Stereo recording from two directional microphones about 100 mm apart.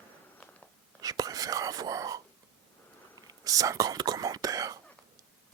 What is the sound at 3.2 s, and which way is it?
Speech, 35° right (ahead or behind).